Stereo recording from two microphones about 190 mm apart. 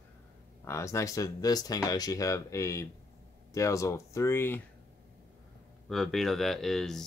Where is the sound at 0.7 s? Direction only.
15° left (ahead or behind).